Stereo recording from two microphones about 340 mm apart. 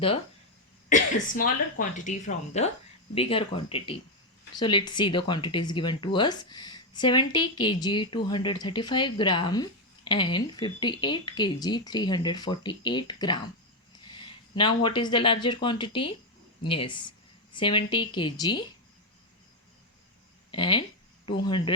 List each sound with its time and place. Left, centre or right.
0.9 s speech: left
20.5 s speech: centre